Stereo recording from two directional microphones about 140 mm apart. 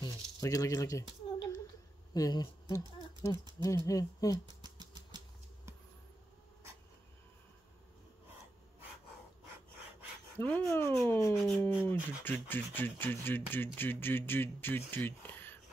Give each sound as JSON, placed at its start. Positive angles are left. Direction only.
{"t": 0.0, "sound": "speech", "side_deg": 25}
{"t": 2.1, "sound": "speech", "side_deg": 25}
{"t": 4.5, "sound": "a sound", "side_deg": -30}
{"t": 10.3, "sound": "speech", "side_deg": 10}
{"t": 11.3, "sound": "speech", "side_deg": 0}
{"t": 11.9, "sound": "speech", "side_deg": 15}